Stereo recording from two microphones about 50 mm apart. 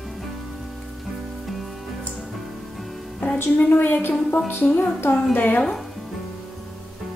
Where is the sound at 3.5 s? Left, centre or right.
Left.